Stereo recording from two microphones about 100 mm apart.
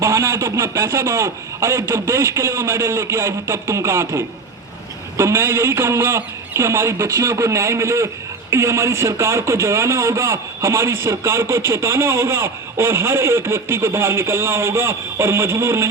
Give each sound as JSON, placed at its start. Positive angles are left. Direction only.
{"t": 0.0, "sound": "a man's voice", "side_deg": -25}